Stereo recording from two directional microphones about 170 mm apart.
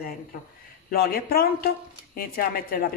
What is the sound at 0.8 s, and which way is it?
Speech, 60° left (ahead or behind).